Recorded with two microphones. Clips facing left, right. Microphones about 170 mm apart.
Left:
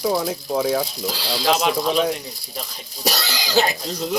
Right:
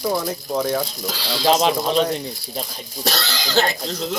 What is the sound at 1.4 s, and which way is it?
Speech, 30° right (ahead or behind).